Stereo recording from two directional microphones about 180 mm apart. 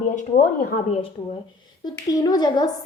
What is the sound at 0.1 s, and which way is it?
Speech, 40° left (ahead or behind).